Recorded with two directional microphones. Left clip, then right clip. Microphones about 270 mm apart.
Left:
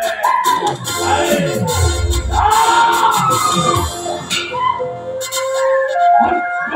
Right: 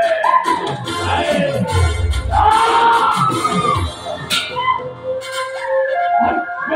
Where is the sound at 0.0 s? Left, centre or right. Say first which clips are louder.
Right 1 dB; left.